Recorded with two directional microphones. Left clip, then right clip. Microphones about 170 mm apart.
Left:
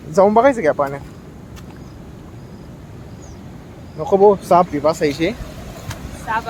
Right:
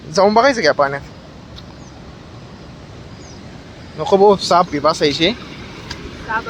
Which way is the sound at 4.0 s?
5° right (ahead or behind).